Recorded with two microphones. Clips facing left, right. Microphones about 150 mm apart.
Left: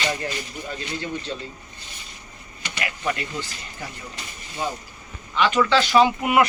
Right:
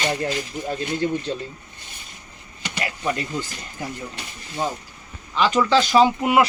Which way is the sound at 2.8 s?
35° right (ahead or behind).